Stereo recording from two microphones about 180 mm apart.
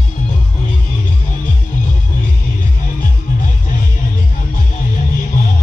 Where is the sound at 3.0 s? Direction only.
50° left (ahead or behind).